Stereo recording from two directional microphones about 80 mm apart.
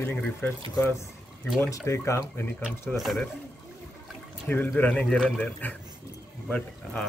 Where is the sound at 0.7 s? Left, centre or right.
Left.